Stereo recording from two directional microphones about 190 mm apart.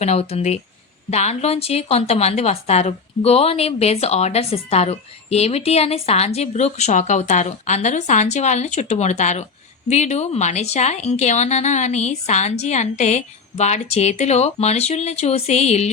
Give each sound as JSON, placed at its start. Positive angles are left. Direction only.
{"t": 0.0, "sound": "speech", "side_deg": 35}